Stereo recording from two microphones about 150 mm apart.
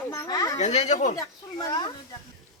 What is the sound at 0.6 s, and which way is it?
Speech, 50° left (ahead or behind).